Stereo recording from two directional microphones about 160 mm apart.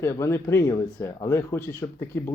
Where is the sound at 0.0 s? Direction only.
15° left (ahead or behind).